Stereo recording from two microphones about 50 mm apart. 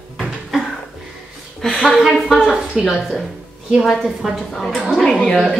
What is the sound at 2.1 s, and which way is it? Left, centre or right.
A woman's voice, centre.